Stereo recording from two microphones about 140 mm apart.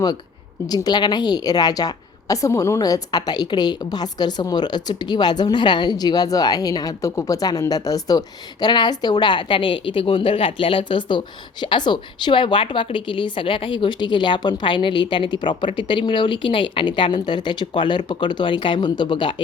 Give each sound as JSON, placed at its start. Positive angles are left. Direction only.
{"t": 0.7, "sound": "a woman's voice", "side_deg": 30}